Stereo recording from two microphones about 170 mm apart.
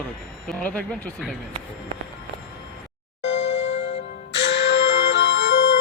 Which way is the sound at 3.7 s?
40° left (ahead or behind).